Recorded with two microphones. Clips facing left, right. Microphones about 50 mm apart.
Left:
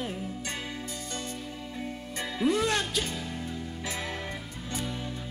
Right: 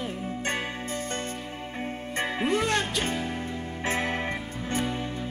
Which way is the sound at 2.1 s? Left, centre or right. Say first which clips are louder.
Right 1 dB; right.